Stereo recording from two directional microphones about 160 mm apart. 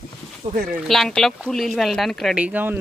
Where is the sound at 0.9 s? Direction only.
Centre (ahead or behind).